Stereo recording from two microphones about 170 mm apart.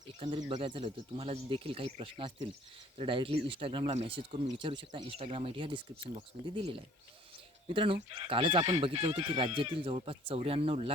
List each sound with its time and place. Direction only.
0.2 s speech: 45° right (ahead or behind)
0.4 s speech: 30° right (ahead or behind)